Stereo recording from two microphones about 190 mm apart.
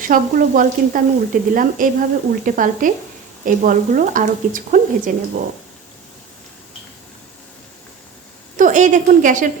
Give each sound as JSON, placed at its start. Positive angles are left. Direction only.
{"t": 0.0, "sound": "sizzle", "side_deg": -45}
{"t": 8.5, "sound": "a woman's voice", "side_deg": -40}